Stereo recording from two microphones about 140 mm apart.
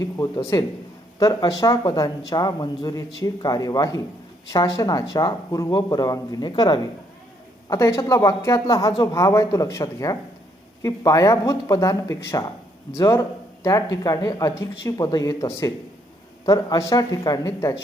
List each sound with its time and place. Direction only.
0.0 s speech: 25° left (ahead or behind)
7.7 s speech: 20° left (ahead or behind)